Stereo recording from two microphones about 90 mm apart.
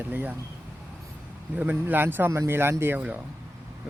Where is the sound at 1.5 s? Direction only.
20° right (ahead or behind).